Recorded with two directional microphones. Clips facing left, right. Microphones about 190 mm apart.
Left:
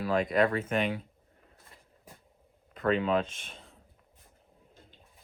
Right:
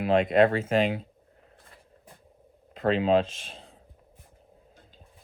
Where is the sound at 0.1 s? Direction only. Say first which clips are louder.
Right 6 dB; 25° right (ahead or behind).